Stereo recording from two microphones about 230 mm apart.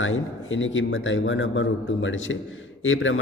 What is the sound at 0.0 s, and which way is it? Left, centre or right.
A man's voice, left.